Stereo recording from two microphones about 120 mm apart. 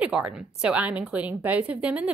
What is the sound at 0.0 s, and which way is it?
A woman's voice, 10° right (ahead or behind).